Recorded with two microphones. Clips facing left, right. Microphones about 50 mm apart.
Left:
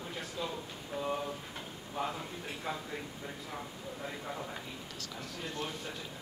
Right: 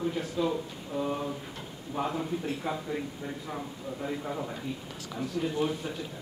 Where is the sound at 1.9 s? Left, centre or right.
Centre.